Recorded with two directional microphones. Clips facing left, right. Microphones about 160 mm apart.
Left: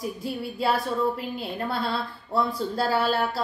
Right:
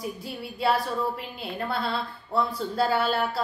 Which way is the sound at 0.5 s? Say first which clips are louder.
Right 1 dB; centre (ahead or behind).